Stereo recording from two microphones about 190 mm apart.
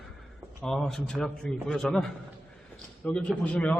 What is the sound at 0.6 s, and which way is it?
A man's voice, centre (ahead or behind).